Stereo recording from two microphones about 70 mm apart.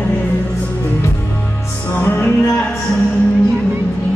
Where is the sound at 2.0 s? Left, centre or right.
Left.